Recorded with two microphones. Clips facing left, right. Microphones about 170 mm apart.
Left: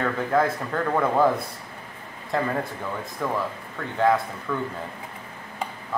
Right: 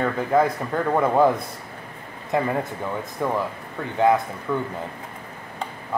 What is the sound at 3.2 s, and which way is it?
Speech, 20° right (ahead or behind).